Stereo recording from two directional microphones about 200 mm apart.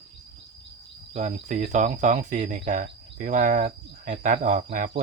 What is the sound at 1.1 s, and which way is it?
Cricket, 35° right (ahead or behind).